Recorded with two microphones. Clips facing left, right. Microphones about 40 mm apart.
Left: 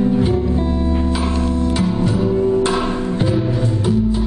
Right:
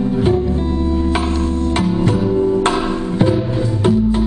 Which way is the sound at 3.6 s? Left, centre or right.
Right.